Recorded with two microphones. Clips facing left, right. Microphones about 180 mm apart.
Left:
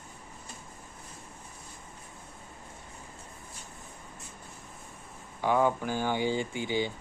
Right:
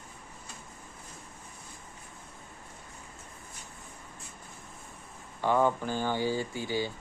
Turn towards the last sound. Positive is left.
turn(degrees=20)  # may be behind; listen again after turning